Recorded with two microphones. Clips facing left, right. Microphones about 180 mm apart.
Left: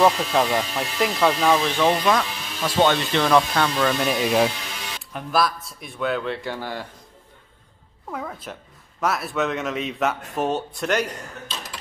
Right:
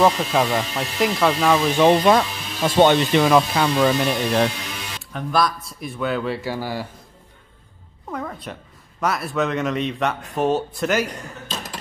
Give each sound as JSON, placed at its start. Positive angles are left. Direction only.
{"t": 0.0, "sound": "speech", "side_deg": 0}
{"t": 1.7, "sound": "speech", "side_deg": -15}
{"t": 2.0, "sound": "speech", "side_deg": -30}
{"t": 2.8, "sound": "speech", "side_deg": -15}
{"t": 4.0, "sound": "speech", "side_deg": 5}
{"t": 8.1, "sound": "music", "side_deg": 0}
{"t": 9.0, "sound": "speech", "side_deg": 0}
{"t": 11.4, "sound": "a sound", "side_deg": -45}